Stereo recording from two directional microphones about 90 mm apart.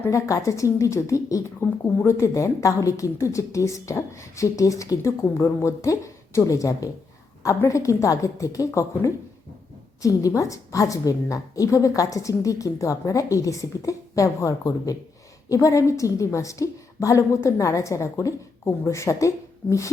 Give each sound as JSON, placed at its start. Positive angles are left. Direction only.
{"t": 0.0, "sound": "a woman's voice", "side_deg": 35}